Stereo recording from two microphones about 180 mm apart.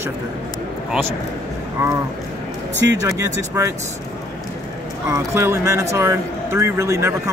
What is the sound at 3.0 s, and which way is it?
Speech, 15° right (ahead or behind).